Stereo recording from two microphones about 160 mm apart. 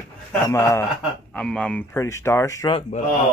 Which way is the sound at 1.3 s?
5° left (ahead or behind).